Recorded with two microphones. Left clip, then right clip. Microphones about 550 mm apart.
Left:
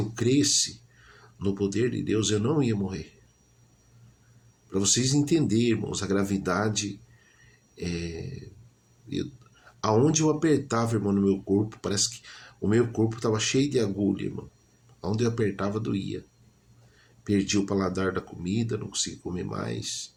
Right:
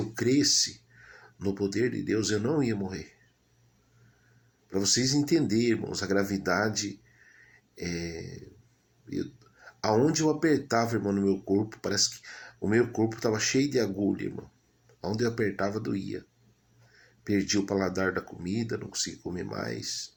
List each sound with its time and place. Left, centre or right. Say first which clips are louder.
0.1 s speech: left 1 dB; left
4.7 s speech: left 1 dB; left
9.8 s speech: left 2 dB; left
15.0 s speech: left 1 dB; left
17.2 s speech: left 2 dB; left